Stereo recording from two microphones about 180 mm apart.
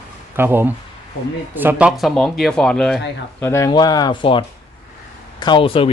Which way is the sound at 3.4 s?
15° left (ahead or behind).